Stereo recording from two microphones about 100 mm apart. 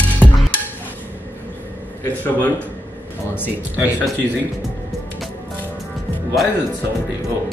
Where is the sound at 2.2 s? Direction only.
15° left (ahead or behind).